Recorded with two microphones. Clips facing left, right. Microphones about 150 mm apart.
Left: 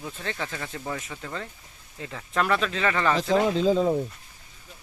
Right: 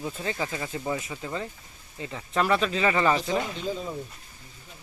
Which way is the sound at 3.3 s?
90° left.